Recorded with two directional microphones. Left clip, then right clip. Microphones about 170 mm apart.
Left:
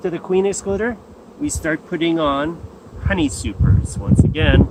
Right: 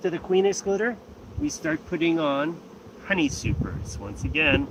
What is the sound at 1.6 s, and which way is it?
Speech, 20° left (ahead or behind).